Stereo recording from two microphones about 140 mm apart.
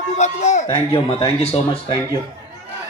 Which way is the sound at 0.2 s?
55° left (ahead or behind).